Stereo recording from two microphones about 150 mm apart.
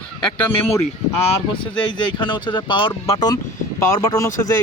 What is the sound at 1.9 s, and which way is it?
Speech, 30° left (ahead or behind).